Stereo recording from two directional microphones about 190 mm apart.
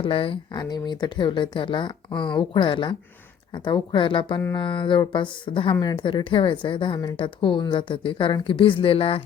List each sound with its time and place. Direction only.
0.0 s a woman's voice: 30° left (ahead or behind)